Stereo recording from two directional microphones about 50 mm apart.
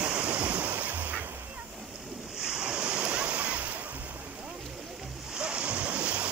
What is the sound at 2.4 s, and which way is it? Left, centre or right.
Waves, centre.